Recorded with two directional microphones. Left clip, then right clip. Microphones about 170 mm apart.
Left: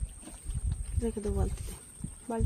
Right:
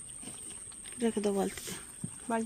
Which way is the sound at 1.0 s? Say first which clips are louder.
Right 4 dB; 50° right (ahead or behind).